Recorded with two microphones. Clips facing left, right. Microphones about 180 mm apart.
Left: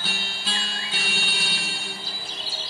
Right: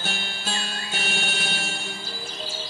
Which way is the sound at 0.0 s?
50° right (ahead or behind).